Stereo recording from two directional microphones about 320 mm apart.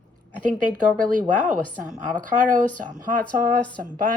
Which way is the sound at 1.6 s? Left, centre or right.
Centre.